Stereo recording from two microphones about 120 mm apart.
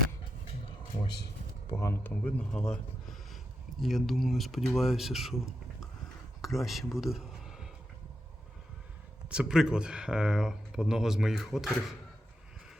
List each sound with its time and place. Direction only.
1.7 s speech: 20° left (ahead or behind); by 5.4 s centre (ahead or behind)
6.4 s speech: centre (ahead or behind)
9.3 s speech: 5° right (ahead or behind)